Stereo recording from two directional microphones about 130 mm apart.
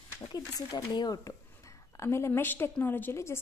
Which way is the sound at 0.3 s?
30° left (ahead or behind).